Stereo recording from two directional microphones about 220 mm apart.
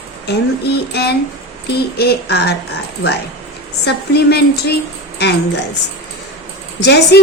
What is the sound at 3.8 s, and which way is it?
Speech, 45° left (ahead or behind).